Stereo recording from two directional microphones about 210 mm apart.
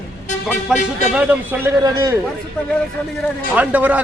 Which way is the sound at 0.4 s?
5° right (ahead or behind).